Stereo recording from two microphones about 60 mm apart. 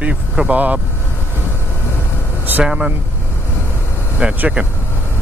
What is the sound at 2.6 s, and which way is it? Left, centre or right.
Speech, centre.